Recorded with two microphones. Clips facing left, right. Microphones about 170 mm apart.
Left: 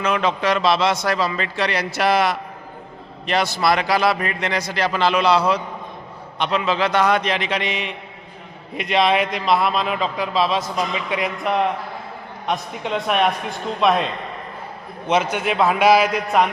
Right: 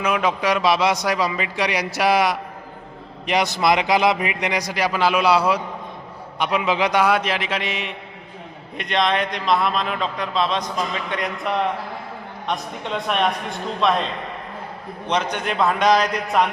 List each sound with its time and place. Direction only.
0.0 s a man's voice: 10° right (ahead or behind)